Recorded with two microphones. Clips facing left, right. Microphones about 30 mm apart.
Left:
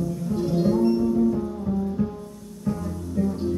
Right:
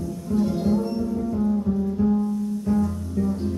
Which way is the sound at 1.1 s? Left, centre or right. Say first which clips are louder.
Left 1 dB; centre.